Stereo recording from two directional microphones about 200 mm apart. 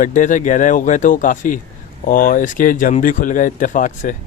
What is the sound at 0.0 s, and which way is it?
Speech, 40° left (ahead or behind).